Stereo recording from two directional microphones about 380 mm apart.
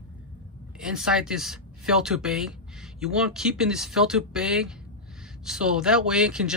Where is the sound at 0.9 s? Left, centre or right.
Centre.